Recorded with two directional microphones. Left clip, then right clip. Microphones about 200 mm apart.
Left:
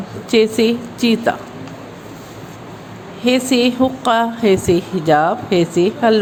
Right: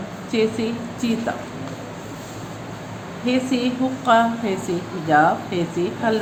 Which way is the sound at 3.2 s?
55° left (ahead or behind).